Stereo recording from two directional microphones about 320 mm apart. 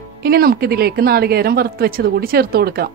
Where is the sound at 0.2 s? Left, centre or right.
Right.